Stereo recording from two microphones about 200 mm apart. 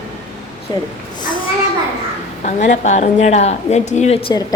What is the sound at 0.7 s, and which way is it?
Speech, 20° left (ahead or behind).